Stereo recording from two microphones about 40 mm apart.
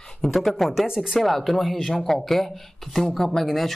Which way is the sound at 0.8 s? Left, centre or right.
Centre.